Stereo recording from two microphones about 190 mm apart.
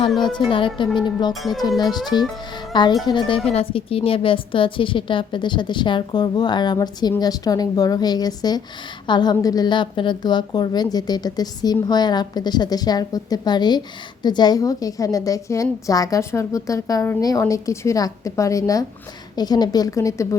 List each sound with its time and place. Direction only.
0.5 s a woman's voice: 25° left (ahead or behind)
1.3 s speech: centre (ahead or behind)
2.1 s a woman's voice: 25° left (ahead or behind)